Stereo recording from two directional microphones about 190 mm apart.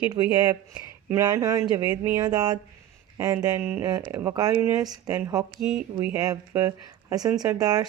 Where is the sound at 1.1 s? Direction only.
15° right (ahead or behind).